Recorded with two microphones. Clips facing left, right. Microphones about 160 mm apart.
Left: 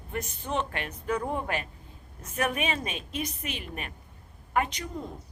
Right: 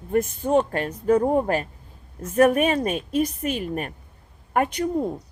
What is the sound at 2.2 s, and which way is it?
A woman's voice, 50° right (ahead or behind).